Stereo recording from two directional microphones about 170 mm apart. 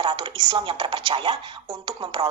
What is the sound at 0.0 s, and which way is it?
Speech, 30° right (ahead or behind).